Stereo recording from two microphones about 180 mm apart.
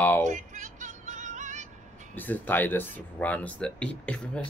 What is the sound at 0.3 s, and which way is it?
Music, 45° right (ahead or behind).